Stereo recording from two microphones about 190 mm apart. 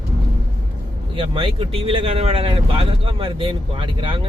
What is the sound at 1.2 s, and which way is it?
Speech, 25° right (ahead or behind).